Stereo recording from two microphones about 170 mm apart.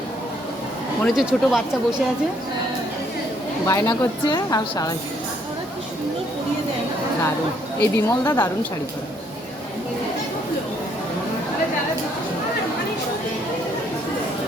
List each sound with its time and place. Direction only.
1.0 s speech: 5° right (ahead or behind)
3.7 s a woman's voice: 15° left (ahead or behind)
7.8 s a woman's voice: 15° left (ahead or behind)